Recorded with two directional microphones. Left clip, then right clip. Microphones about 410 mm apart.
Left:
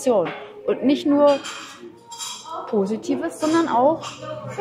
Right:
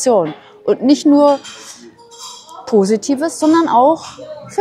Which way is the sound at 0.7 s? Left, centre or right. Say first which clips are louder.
Right 8 dB; right.